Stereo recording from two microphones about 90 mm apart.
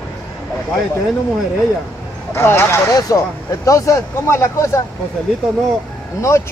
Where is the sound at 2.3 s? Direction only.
25° left (ahead or behind).